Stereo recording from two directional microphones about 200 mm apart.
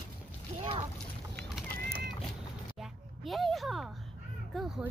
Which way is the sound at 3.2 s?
Centre (ahead or behind).